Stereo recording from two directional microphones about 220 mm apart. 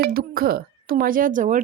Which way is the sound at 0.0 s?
45° right (ahead or behind).